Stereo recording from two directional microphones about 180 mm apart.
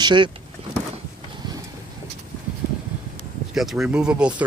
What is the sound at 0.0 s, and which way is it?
Speech, 25° right (ahead or behind).